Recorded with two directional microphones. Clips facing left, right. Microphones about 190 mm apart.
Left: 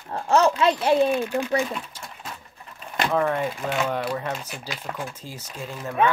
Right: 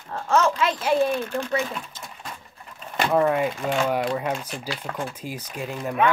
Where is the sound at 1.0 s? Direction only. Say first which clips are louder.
Left 2 dB; 10° left (ahead or behind).